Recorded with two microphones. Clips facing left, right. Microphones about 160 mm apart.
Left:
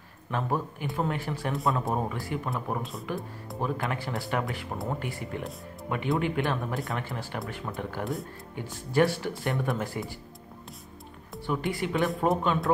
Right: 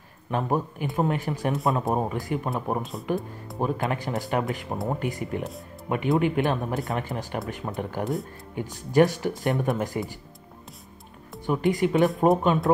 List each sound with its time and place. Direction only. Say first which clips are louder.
0.3 s speech: right 4 dB; 15° right (ahead or behind)
11.3 s speech: right 6 dB; 20° right (ahead or behind)